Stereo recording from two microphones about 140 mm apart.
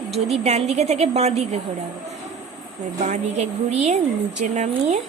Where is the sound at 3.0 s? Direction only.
55° right (ahead or behind).